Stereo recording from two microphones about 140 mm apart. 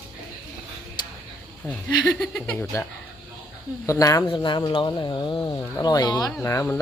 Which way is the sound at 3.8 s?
25° left (ahead or behind).